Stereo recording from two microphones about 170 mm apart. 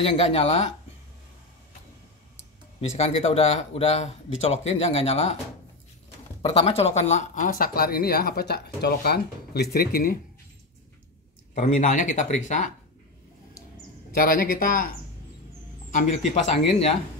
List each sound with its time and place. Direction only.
0.0 s speech: 35° left (ahead or behind)
2.8 s speech: 40° left (ahead or behind)
6.4 s speech: 35° left (ahead or behind); by 10.1 s 60° left (ahead or behind)
11.5 s speech: 50° left (ahead or behind)
14.1 s speech: 60° left (ahead or behind)
15.9 s a man's voice: 45° left (ahead or behind)